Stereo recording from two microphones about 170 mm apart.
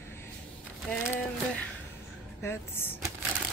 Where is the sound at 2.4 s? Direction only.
15° left (ahead or behind).